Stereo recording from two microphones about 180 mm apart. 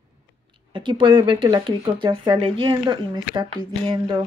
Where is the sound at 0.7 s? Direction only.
25° right (ahead or behind).